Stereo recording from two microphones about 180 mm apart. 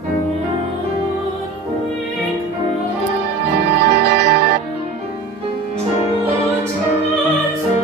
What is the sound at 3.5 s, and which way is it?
Music, 65° right (ahead or behind).